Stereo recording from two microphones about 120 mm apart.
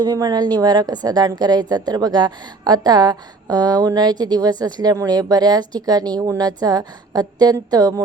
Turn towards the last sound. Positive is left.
turn(degrees=-30)  # may be behind; listen again after turning